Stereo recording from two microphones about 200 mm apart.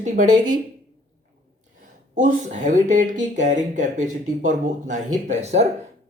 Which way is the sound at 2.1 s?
40° right (ahead or behind).